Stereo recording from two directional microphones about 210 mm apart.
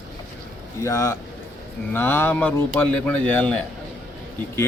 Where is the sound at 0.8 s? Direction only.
15° left (ahead or behind).